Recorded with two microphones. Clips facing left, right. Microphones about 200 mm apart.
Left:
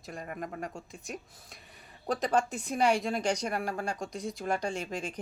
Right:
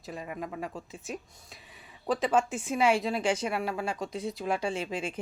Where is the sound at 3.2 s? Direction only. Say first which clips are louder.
Right 2 dB; 40° left (ahead or behind).